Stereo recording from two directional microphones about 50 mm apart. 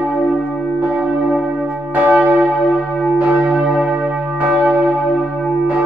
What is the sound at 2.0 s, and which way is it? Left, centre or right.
Church bell, right.